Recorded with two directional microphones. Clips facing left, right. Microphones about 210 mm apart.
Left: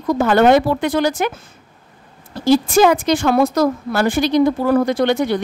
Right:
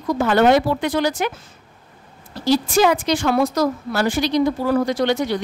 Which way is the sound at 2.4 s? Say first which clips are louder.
Left 4 dB; 50° left (ahead or behind).